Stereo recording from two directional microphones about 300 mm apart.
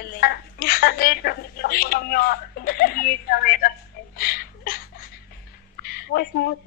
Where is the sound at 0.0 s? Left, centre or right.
Left.